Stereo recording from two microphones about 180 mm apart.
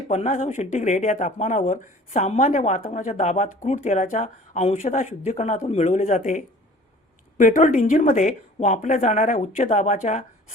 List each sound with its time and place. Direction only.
0.1 s speech: 40° left (ahead or behind)